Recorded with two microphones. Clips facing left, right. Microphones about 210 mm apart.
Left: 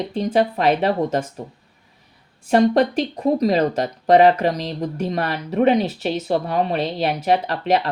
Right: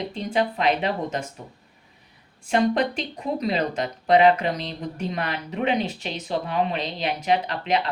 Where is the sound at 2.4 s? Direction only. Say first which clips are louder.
Left 6 dB; 45° left (ahead or behind).